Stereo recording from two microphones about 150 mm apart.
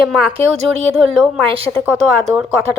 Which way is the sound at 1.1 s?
5° left (ahead or behind).